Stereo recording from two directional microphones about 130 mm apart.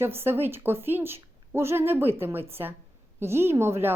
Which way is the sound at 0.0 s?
20° right (ahead or behind).